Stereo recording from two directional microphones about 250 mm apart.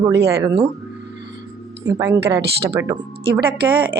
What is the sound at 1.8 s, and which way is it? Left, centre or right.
Speech, centre.